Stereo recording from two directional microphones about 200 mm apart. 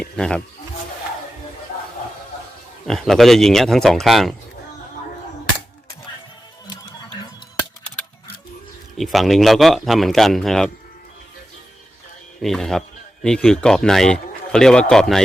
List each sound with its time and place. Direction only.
0.0 s speech: 5° left (ahead or behind)
2.8 s speech: centre (ahead or behind)
6.7 s music: 25° left (ahead or behind)
9.0 s speech: centre (ahead or behind)
12.4 s speech: centre (ahead or behind)